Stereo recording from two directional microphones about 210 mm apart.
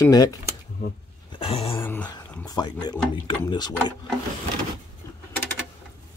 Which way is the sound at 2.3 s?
20° left (ahead or behind).